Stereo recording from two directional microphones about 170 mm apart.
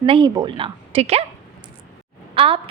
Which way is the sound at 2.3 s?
30° right (ahead or behind).